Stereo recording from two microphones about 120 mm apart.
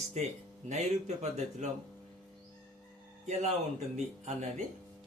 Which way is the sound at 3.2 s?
70° right (ahead or behind).